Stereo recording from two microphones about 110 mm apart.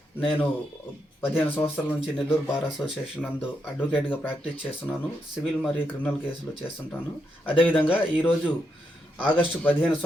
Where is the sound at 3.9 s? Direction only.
15° left (ahead or behind).